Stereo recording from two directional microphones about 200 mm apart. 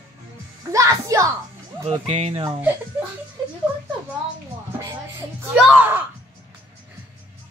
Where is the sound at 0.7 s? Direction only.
15° right (ahead or behind).